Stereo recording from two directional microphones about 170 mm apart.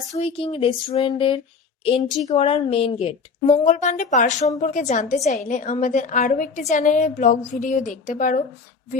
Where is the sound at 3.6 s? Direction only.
45° left (ahead or behind).